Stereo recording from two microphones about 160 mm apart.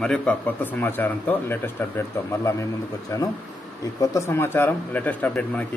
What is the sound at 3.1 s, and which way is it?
Speech, 20° left (ahead or behind).